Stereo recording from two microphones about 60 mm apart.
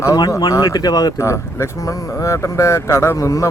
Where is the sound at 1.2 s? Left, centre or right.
Left.